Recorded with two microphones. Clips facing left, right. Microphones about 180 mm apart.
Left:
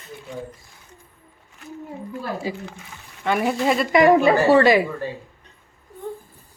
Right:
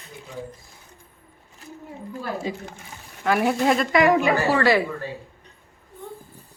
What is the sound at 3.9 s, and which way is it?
Speech, 25° left (ahead or behind).